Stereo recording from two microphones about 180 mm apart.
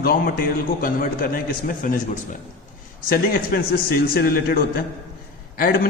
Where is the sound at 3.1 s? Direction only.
55° left (ahead or behind).